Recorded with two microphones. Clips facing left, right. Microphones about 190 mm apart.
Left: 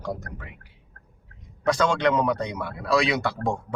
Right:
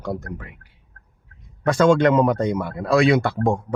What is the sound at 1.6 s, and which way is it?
Speech, 50° right (ahead or behind).